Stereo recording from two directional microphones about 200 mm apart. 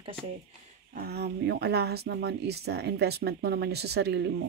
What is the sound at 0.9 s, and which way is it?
Speech, 50° right (ahead or behind).